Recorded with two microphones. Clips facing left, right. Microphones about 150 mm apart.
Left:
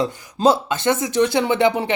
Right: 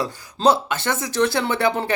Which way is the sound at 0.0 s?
20° left (ahead or behind).